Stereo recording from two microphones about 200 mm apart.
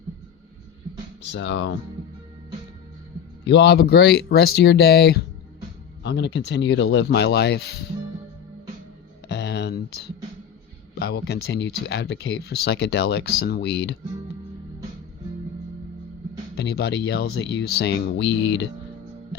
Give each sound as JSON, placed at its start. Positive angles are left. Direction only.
{"t": 1.3, "sound": "speech", "side_deg": 65}
{"t": 3.4, "sound": "speech", "side_deg": 60}
{"t": 9.3, "sound": "a sound", "side_deg": 60}
{"t": 10.9, "sound": "speech", "side_deg": 55}
{"t": 16.6, "sound": "speech", "side_deg": 55}